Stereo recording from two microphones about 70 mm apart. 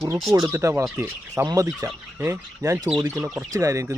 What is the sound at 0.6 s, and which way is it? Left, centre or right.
Speech, right.